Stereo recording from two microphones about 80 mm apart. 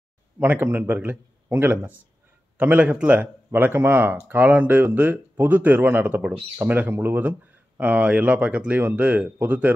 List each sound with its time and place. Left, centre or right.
0.4 s speech: right